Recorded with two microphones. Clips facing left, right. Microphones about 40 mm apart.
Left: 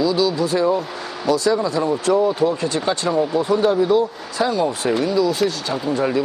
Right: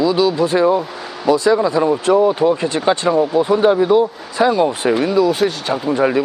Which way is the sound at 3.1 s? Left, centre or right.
Centre.